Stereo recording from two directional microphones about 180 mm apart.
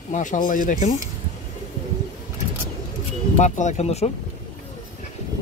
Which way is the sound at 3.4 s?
40° left (ahead or behind).